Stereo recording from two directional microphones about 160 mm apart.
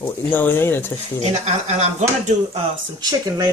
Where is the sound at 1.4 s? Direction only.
45° right (ahead or behind).